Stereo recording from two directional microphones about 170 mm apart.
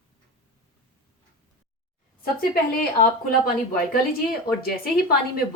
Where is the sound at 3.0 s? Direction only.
60° left (ahead or behind).